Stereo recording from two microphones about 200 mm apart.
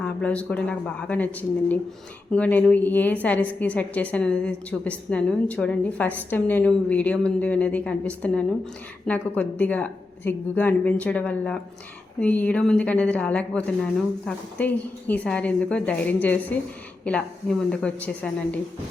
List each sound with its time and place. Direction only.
0.0 s a woman's voice: 5° left (ahead or behind)